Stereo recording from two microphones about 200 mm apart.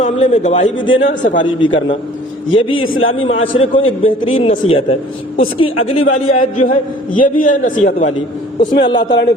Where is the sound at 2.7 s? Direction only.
90° left.